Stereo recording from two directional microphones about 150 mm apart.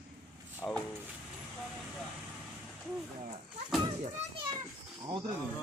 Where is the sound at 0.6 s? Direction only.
15° left (ahead or behind).